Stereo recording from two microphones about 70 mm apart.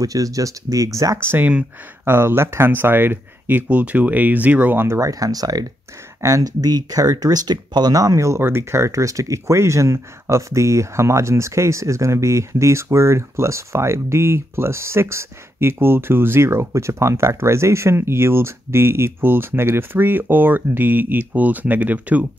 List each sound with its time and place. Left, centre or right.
0.0 s speech: right
1.2 s speech: right
4.8 s speech: right